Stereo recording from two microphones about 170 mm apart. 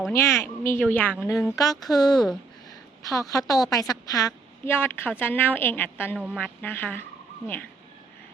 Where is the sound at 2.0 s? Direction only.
Centre (ahead or behind).